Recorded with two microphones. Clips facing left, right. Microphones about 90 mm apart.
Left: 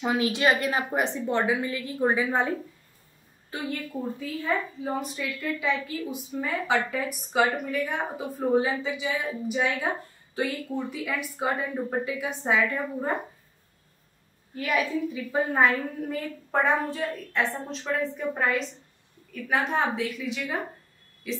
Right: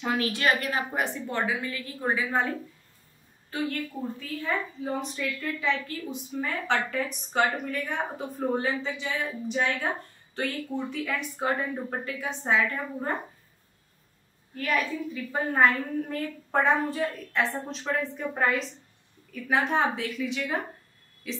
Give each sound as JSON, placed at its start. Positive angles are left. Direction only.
{"t": 0.0, "sound": "a woman's voice", "side_deg": 20}
{"t": 4.2, "sound": "a woman's voice", "side_deg": 5}
{"t": 14.5, "sound": "a woman's voice", "side_deg": 10}